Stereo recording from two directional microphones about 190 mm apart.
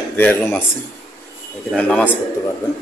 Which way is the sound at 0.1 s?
10° left (ahead or behind).